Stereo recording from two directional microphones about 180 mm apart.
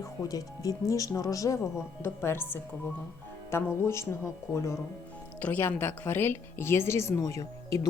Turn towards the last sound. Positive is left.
turn(degrees=15)  # may be behind; listen again after turning